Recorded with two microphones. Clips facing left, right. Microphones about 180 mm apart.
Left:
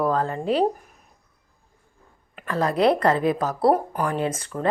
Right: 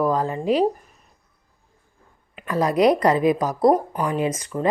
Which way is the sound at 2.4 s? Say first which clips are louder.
Right 2 dB; 10° right (ahead or behind).